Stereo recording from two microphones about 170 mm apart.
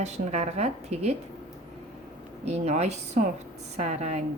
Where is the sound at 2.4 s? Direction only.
40° right (ahead or behind).